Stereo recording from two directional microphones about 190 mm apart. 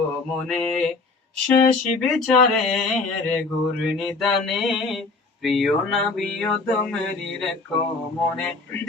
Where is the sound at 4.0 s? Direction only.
Centre (ahead or behind).